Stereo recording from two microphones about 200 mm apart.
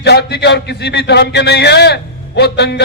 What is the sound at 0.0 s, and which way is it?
A man's voice, 55° left (ahead or behind).